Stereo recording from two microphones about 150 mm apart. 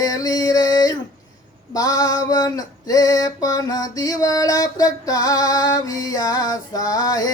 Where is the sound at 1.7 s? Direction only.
25° left (ahead or behind).